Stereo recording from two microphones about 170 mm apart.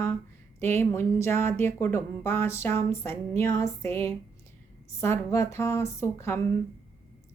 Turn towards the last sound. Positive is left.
turn(degrees=15)  # may be behind; listen again after turning